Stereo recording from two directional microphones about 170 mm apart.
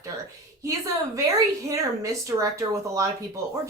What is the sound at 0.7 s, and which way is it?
A woman's voice, 20° right (ahead or behind).